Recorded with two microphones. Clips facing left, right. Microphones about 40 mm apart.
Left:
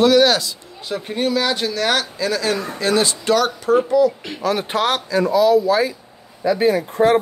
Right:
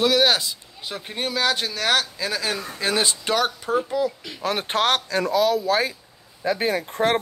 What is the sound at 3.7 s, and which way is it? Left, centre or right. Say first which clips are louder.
Speech: left 9 dB; left.